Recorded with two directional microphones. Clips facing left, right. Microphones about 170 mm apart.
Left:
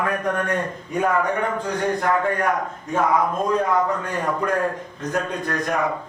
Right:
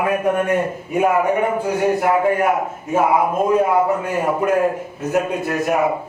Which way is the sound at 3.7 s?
25° right (ahead or behind).